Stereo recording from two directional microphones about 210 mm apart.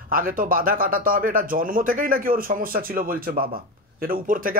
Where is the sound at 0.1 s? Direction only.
40° right (ahead or behind).